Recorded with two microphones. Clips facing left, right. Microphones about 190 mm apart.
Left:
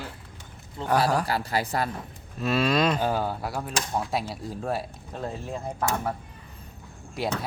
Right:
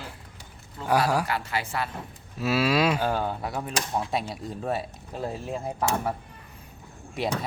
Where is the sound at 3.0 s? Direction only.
10° left (ahead or behind); by 6.1 s 10° right (ahead or behind).